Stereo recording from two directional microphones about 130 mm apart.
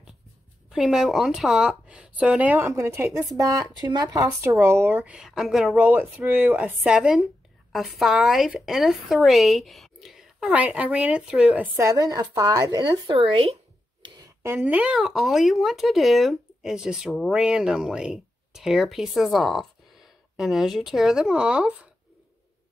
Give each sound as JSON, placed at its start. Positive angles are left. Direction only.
{"t": 0.7, "sound": "a woman's voice", "side_deg": -5}
{"t": 4.2, "sound": "a woman's voice", "side_deg": -20}
{"t": 5.8, "sound": "a woman's voice", "side_deg": -10}
{"t": 11.6, "sound": "a woman's voice", "side_deg": -15}
{"t": 11.9, "sound": "speech", "side_deg": -30}
{"t": 14.4, "sound": "speech", "side_deg": -15}